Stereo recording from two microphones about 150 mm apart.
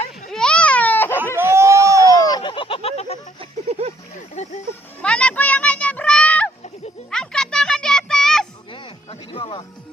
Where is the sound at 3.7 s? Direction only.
45° right (ahead or behind).